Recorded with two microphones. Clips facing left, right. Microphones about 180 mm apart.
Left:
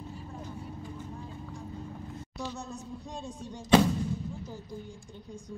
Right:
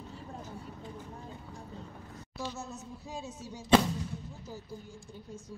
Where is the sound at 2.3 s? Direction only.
5° right (ahead or behind).